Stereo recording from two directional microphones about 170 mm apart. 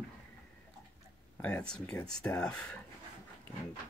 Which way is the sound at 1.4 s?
5° left (ahead or behind).